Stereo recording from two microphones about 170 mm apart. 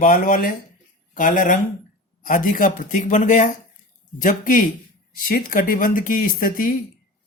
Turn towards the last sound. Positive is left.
turn(degrees=55)  # may be behind; listen again after turning